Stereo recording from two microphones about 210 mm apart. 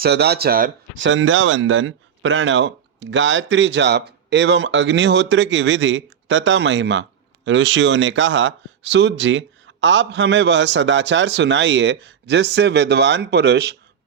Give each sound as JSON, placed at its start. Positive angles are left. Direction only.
{"t": 0.0, "sound": "speech", "side_deg": -50}
{"t": 1.0, "sound": "speech", "side_deg": -65}